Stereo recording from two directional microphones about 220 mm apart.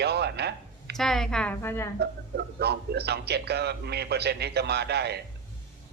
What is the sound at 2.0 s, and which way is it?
A man's voice, 50° right (ahead or behind).